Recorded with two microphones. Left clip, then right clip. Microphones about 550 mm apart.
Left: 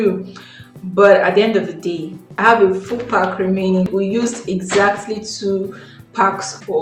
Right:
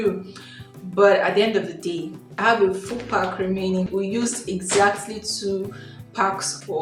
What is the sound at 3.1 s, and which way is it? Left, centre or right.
A woman's voice, right.